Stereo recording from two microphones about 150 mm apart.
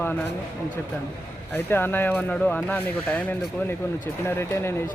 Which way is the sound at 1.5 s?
15° left (ahead or behind).